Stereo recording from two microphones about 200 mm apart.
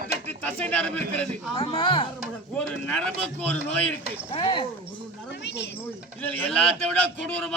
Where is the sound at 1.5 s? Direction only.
25° left (ahead or behind).